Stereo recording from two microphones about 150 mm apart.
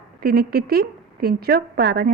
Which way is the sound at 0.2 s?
90° right.